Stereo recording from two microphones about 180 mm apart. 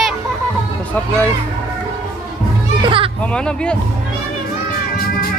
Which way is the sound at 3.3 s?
5° left (ahead or behind).